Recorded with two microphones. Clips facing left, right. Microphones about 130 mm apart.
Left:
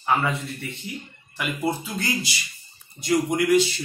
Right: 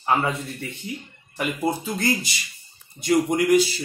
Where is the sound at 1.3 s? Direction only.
45° right (ahead or behind).